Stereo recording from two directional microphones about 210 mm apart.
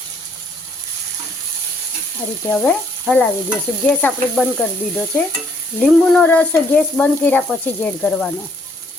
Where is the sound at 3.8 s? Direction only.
5° left (ahead or behind).